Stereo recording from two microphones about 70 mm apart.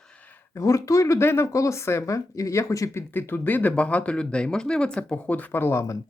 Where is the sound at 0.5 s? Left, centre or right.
Left.